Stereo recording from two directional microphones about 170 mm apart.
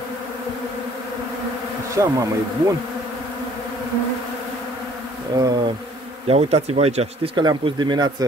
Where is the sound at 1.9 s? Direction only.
20° right (ahead or behind).